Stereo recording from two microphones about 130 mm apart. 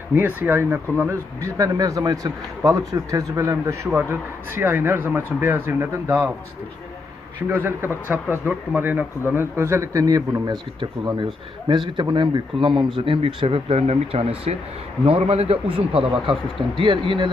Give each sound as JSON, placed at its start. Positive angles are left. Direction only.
{"t": 0.1, "sound": "speech", "side_deg": -15}
{"t": 7.4, "sound": "speech", "side_deg": -15}